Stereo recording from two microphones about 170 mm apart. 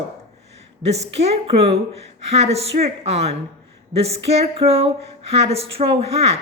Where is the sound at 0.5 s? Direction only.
40° right (ahead or behind).